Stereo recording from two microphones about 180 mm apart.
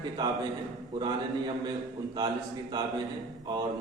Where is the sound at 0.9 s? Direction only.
25° right (ahead or behind).